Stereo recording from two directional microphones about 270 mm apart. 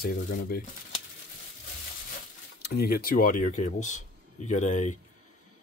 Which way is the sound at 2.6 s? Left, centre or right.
Left.